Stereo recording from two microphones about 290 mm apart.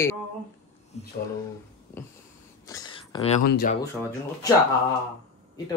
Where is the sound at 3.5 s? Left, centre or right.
Left.